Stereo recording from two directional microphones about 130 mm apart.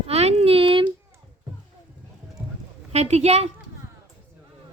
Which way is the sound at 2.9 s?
55° right (ahead or behind).